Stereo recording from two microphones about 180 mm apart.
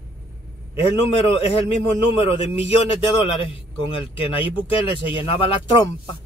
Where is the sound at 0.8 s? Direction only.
35° left (ahead or behind).